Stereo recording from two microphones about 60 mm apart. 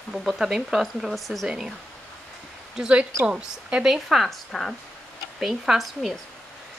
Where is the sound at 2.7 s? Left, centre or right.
Centre.